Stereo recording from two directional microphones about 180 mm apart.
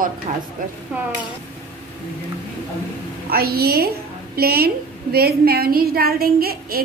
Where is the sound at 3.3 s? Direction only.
60° right (ahead or behind).